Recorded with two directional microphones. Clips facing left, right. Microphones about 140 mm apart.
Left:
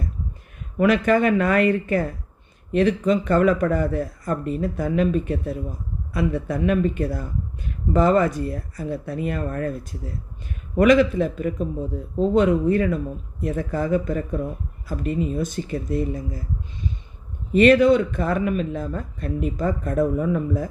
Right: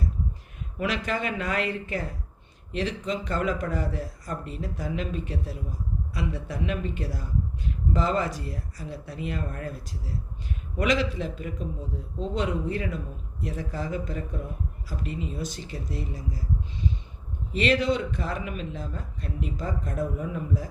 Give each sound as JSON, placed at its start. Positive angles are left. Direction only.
{"t": 0.8, "sound": "a man's voice", "side_deg": 55}
{"t": 10.8, "sound": "a man's voice", "side_deg": 55}
{"t": 17.5, "sound": "a man's voice", "side_deg": 55}